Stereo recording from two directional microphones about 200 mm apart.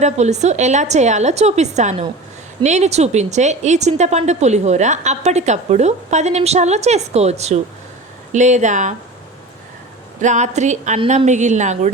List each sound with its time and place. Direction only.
0.0 s a woman's voice: 35° right (ahead or behind)
10.2 s a woman's voice: 35° right (ahead or behind)